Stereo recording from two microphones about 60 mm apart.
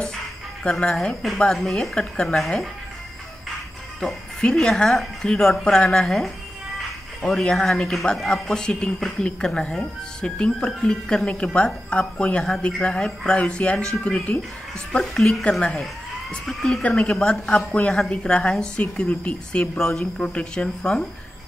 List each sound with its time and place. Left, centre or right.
0.7 s a woman's voice: centre
1.4 s a woman's voice: centre
2.4 s speech: centre
4.0 s a woman's voice: centre
14.9 s a woman's voice: centre
19.8 s speech: centre
20.2 s a woman's voice: centre